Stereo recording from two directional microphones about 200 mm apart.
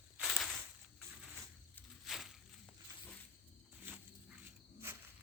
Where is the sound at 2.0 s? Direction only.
Centre (ahead or behind).